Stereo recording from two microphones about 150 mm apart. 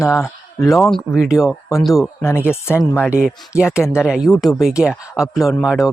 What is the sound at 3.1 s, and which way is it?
Speech, 5° right (ahead or behind).